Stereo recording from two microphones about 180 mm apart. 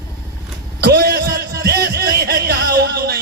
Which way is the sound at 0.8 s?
60° right (ahead or behind).